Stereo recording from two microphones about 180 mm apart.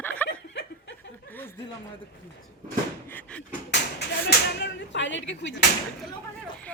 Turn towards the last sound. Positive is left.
turn(degrees=80)